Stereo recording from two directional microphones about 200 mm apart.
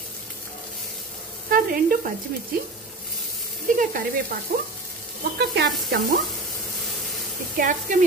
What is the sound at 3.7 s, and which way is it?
Speech, 40° right (ahead or behind).